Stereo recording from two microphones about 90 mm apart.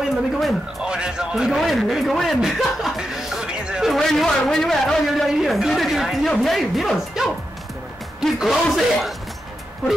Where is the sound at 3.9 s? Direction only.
5° left (ahead or behind).